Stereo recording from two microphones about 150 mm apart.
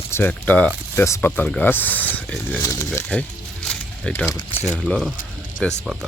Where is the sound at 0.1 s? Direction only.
10° left (ahead or behind).